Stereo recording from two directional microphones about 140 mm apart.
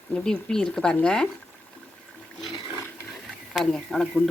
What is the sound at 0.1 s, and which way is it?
A man's voice, 5° left (ahead or behind).